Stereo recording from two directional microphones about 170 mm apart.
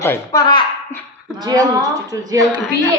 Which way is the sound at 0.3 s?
25° left (ahead or behind).